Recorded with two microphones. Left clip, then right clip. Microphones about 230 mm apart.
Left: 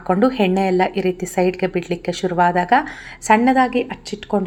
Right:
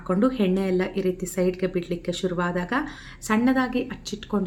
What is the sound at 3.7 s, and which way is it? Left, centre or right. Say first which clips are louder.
Speech: left 7 dB; right.